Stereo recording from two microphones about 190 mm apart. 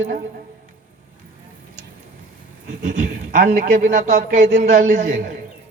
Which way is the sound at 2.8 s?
40° right (ahead or behind).